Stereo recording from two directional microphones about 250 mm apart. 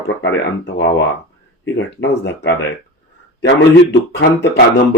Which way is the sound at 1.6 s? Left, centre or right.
Left.